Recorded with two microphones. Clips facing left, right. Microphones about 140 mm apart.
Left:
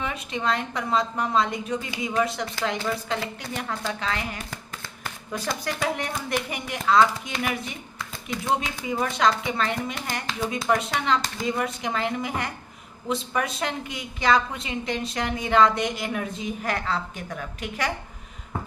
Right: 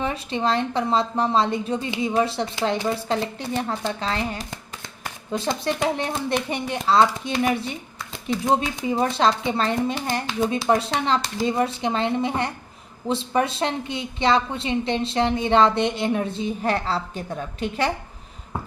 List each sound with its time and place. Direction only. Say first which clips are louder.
0.0 s a woman's voice: right 4 dB; 30° right (ahead or behind)